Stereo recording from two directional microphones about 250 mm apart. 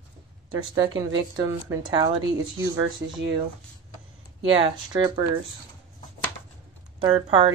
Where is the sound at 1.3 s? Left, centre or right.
Centre.